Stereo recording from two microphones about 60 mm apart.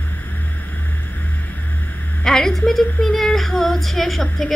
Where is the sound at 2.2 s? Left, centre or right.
Centre.